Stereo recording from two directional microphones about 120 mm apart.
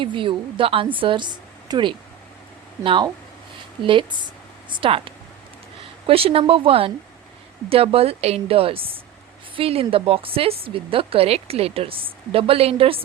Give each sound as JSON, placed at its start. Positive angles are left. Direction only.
{"t": 0.0, "sound": "a woman's voice", "side_deg": -45}
{"t": 4.7, "sound": "a woman's voice", "side_deg": -50}